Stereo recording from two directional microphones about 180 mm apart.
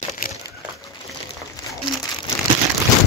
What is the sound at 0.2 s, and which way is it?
Crumpling, 55° left (ahead or behind).